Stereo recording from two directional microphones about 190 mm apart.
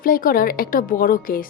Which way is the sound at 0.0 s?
50° left (ahead or behind).